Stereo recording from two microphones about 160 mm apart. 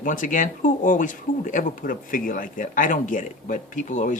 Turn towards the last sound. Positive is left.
turn(degrees=50)  # may be behind; listen again after turning